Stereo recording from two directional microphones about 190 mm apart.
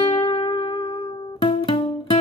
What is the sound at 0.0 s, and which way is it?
Music, 30° left (ahead or behind).